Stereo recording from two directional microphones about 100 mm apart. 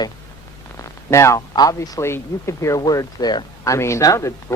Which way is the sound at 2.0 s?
25° left (ahead or behind).